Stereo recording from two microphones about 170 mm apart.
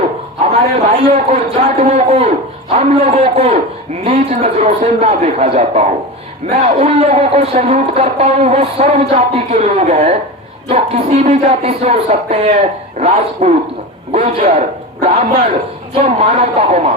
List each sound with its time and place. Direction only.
0.5 s speech: 35° right (ahead or behind)